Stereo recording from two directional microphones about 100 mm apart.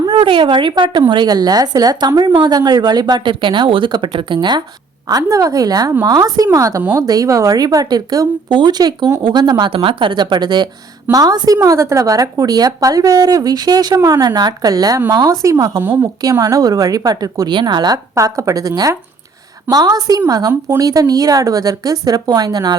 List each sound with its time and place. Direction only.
0.1 s a woman's voice: 60° right (ahead or behind)
5.0 s a woman's voice: 35° right (ahead or behind)
9.7 s a woman's voice: 60° right (ahead or behind); by 15.8 s 40° right (ahead or behind)
15.8 s a woman's voice: 20° right (ahead or behind)
16.2 s a woman's voice: 35° right (ahead or behind)
17.5 s a woman's voice: 50° right (ahead or behind)
18.1 s a woman's voice: 30° right (ahead or behind)